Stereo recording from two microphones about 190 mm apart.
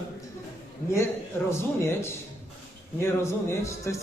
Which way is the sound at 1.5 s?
15° left (ahead or behind).